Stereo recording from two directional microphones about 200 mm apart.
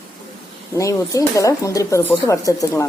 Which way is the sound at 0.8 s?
15° left (ahead or behind).